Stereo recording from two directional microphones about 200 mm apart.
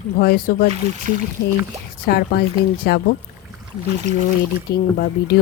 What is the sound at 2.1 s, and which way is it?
Speech, 50° left (ahead or behind).